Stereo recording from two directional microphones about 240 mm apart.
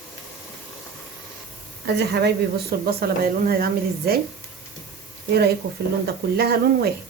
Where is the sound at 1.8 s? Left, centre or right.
Right.